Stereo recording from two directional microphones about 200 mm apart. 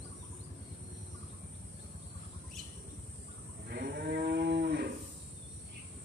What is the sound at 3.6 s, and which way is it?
Cattle, 50° right (ahead or behind).